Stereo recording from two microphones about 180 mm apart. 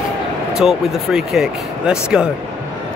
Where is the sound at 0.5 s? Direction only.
5° right (ahead or behind).